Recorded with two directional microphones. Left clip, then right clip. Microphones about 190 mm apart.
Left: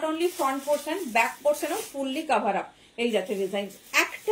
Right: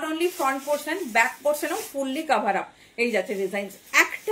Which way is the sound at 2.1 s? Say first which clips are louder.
Right 2 dB; 15° right (ahead or behind).